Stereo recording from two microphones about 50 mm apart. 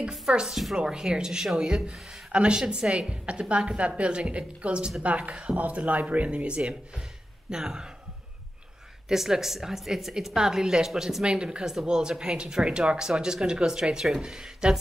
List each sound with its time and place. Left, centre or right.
0.3 s speech: centre
9.1 s speech: centre
11.2 s speech: centre